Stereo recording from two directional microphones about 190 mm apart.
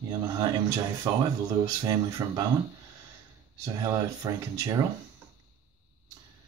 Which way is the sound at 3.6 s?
20° right (ahead or behind).